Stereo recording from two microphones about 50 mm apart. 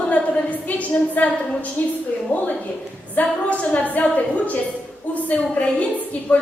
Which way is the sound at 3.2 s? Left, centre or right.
Left.